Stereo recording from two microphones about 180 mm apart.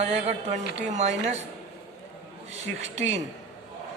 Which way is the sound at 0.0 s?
35° right (ahead or behind).